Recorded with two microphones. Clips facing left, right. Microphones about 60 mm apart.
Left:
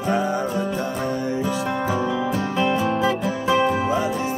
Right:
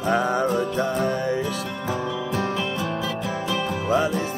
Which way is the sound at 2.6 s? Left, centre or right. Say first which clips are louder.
Left 6 dB; left.